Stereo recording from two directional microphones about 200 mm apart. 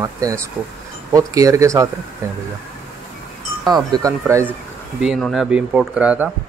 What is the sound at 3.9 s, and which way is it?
Speech, 15° right (ahead or behind).